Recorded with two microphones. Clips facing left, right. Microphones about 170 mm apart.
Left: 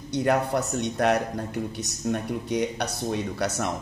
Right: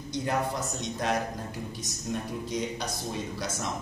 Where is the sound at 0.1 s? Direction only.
65° left (ahead or behind).